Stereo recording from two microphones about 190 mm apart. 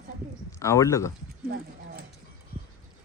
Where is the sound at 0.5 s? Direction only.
15° left (ahead or behind).